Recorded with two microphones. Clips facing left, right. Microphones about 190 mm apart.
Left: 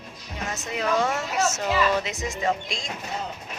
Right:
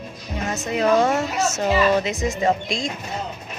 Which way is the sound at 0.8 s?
40° right (ahead or behind).